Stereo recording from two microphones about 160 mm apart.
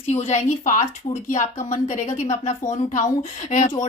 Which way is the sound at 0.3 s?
45° left (ahead or behind).